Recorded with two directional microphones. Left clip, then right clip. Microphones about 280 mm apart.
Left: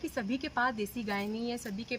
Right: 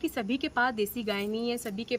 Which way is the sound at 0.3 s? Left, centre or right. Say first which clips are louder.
Right 4 dB; centre.